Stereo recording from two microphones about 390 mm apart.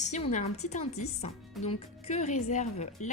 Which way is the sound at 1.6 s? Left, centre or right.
Centre.